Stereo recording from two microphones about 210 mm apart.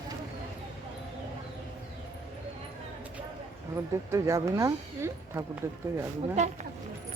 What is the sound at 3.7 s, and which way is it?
Speech, 15° right (ahead or behind).